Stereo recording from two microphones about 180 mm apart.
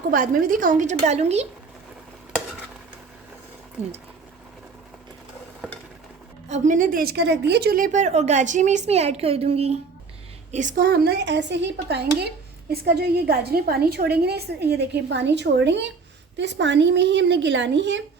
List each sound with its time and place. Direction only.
0.1 s a woman's voice: 50° right (ahead or behind)
3.8 s a woman's voice: 40° right (ahead or behind)
6.5 s a woman's voice: 45° right (ahead or behind); by 7.9 s 60° right (ahead or behind)
7.9 s a woman's voice: 40° right (ahead or behind)
10.5 s a woman's voice: 45° right (ahead or behind); by 18.0 s 90° right